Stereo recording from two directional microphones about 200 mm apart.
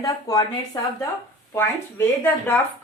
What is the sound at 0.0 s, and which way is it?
A woman's voice, 20° left (ahead or behind).